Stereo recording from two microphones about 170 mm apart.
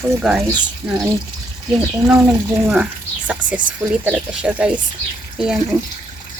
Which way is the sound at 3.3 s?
10° right (ahead or behind).